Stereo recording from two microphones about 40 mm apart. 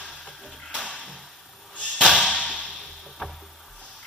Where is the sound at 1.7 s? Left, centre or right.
Left.